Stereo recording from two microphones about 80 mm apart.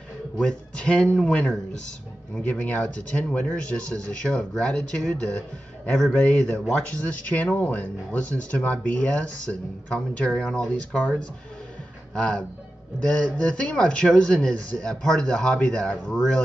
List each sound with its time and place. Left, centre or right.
0.4 s speech: centre
12.2 s speech: centre